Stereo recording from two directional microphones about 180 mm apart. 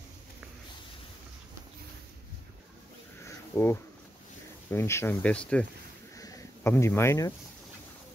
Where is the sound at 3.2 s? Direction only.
15° left (ahead or behind).